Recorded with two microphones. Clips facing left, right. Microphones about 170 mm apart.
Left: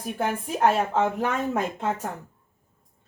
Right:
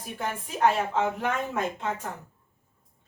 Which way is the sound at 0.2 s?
50° left (ahead or behind).